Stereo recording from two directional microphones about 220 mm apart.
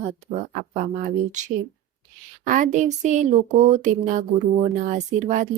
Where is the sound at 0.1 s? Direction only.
35° right (ahead or behind).